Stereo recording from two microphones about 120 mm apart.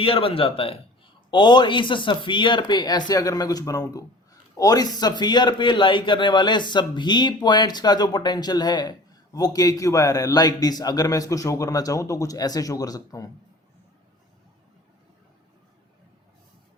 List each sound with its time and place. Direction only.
0.0 s a man's voice: 50° left (ahead or behind); by 13.2 s 30° left (ahead or behind)